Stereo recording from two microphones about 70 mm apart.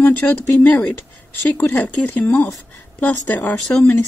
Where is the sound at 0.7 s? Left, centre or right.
Left.